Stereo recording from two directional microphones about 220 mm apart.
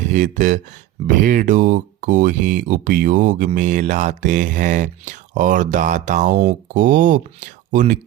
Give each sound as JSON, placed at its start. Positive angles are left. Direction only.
{"t": 0.1, "sound": "speech", "side_deg": -35}